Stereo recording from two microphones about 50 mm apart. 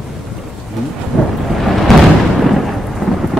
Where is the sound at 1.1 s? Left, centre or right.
Centre.